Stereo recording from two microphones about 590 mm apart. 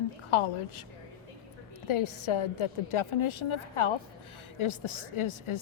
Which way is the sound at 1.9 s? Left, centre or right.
Left.